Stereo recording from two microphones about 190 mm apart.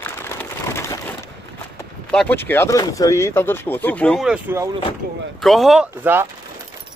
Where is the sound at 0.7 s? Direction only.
15° left (ahead or behind).